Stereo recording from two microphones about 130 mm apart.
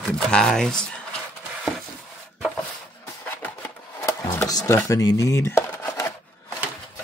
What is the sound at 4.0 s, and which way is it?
Speech, 25° left (ahead or behind).